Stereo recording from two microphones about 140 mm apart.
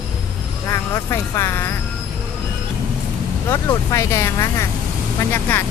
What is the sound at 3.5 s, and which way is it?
Speech, 20° left (ahead or behind).